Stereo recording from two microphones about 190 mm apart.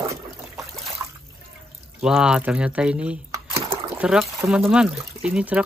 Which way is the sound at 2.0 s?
5° right (ahead or behind).